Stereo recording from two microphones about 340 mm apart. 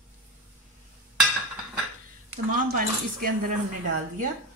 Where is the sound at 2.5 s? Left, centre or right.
Right.